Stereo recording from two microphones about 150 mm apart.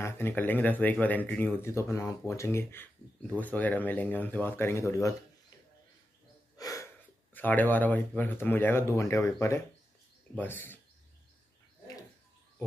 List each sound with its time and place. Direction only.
0.0 s speech: 15° left (ahead or behind)
6.6 s a sound: 20° left (ahead or behind)
7.3 s speech: 10° left (ahead or behind)